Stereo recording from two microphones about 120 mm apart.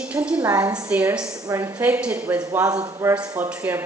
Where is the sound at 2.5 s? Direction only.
25° right (ahead or behind).